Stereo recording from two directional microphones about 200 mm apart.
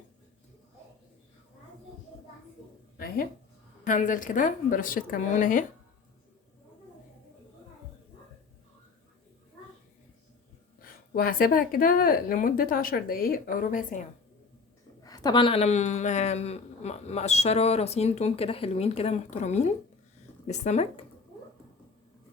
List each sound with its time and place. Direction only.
3.8 s speech: 40° left (ahead or behind)
10.8 s speech: 45° left (ahead or behind)
15.0 s speech: 20° left (ahead or behind)